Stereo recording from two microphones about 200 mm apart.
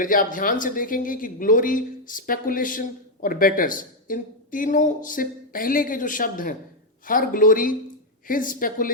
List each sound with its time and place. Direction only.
0.0 s speech: 40° left (ahead or behind)